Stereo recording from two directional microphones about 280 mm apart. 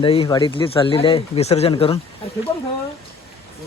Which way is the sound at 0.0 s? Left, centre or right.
Centre.